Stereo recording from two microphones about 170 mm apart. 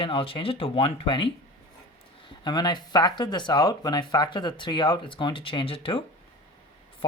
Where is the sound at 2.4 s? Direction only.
25° left (ahead or behind).